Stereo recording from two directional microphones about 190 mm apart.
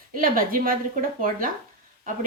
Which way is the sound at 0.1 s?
45° right (ahead or behind).